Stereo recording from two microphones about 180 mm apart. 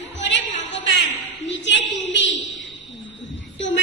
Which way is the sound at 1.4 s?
85° left.